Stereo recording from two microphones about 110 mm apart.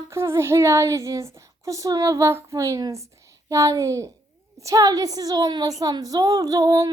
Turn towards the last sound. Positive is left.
turn(degrees=-35)  # may be behind; listen again after turning